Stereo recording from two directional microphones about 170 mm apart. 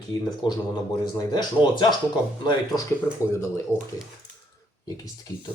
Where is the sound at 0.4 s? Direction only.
30° left (ahead or behind).